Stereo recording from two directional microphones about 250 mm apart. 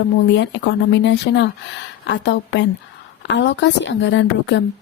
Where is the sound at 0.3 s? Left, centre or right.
Left.